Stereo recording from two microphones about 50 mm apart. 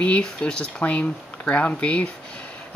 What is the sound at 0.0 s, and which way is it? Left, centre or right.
Speech, left.